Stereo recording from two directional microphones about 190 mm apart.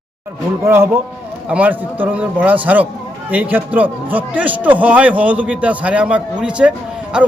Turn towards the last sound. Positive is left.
turn(degrees=-5)  # may be behind; listen again after turning